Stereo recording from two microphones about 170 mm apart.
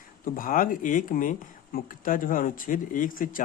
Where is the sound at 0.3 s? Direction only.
55° left (ahead or behind).